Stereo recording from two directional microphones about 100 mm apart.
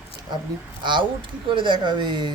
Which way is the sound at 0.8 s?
55° right (ahead or behind).